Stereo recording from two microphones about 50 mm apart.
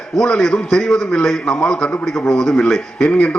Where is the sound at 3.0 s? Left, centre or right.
Left.